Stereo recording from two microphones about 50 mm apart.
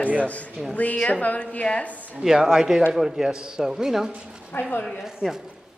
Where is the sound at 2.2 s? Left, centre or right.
Centre.